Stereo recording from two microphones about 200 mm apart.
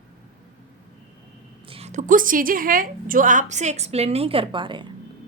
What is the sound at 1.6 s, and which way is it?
A woman's voice, 30° right (ahead or behind).